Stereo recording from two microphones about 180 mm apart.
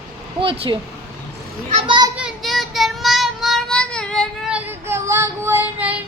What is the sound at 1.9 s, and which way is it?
Speech, 25° right (ahead or behind).